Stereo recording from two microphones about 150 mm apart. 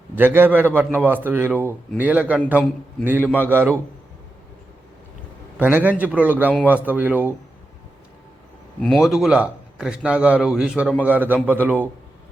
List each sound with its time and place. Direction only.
0.2 s a man's voice: 15° right (ahead or behind)
1.5 s speech: 10° left (ahead or behind)
2.0 s a man's voice: 10° right (ahead or behind)
5.5 s a man's voice: 10° right (ahead or behind)
8.8 s a man's voice: centre (ahead or behind)